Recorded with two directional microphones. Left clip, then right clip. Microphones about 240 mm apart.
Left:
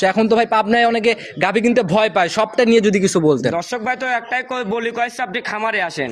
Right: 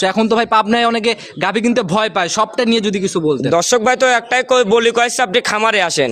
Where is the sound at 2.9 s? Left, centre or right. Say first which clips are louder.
Left 1 dB; left.